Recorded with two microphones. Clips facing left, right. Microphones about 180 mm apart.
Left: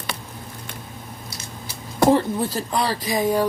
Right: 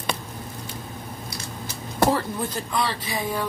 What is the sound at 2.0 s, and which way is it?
Speech, 30° left (ahead or behind).